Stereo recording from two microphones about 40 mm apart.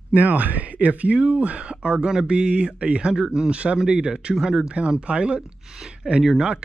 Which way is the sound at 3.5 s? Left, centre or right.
Right.